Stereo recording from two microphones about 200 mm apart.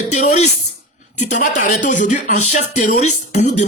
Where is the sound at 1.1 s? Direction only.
35° left (ahead or behind).